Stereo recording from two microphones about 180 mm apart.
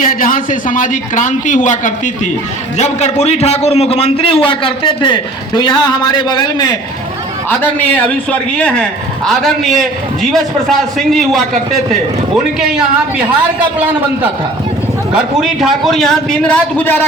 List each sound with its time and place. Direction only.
0.0 s a man's voice: 50° left (ahead or behind); by 6.7 s 25° left (ahead or behind)
7.5 s a man's voice: 10° left (ahead or behind)
12.5 s a man's voice: 5° right (ahead or behind)
15.1 s a man's voice: centre (ahead or behind)